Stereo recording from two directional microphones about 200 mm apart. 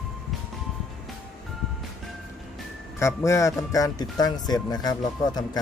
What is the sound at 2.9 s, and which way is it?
Speech, 15° left (ahead or behind).